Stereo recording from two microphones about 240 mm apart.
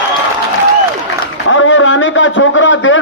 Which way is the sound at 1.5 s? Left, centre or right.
Left.